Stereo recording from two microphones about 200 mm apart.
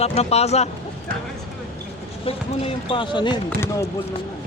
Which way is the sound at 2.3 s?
25° left (ahead or behind).